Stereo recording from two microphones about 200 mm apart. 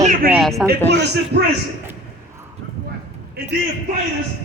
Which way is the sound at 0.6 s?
5° right (ahead or behind).